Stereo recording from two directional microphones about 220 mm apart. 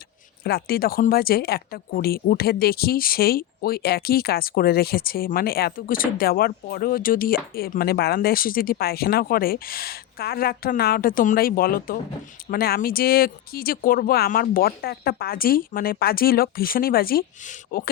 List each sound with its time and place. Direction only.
0.4 s speech: 45° left (ahead or behind)